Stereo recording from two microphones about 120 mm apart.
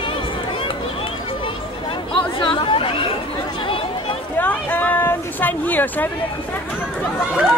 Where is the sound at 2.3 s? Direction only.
45° left (ahead or behind).